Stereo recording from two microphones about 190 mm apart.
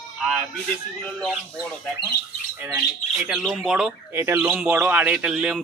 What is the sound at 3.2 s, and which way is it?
Speech, centre (ahead or behind).